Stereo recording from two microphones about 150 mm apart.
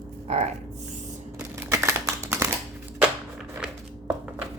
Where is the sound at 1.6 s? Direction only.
20° right (ahead or behind).